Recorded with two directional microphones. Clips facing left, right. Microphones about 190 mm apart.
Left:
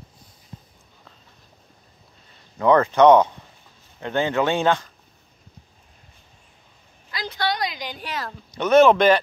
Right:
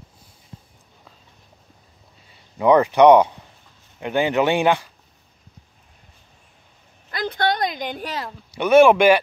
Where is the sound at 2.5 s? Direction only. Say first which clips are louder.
Right 2 dB; 15° right (ahead or behind).